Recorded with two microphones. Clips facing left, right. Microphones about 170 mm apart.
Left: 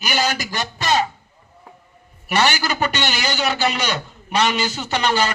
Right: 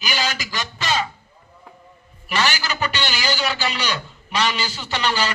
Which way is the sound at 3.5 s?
40° left (ahead or behind).